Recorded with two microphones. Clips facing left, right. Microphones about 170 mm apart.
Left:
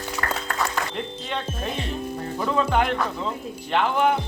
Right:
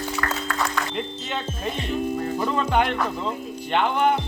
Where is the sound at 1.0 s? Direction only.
Centre (ahead or behind).